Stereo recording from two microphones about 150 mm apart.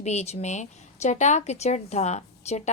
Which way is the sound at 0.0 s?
50° left (ahead or behind).